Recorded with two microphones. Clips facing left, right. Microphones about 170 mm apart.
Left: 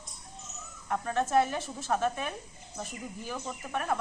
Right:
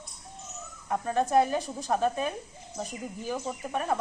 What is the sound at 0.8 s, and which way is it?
Speech, 25° right (ahead or behind).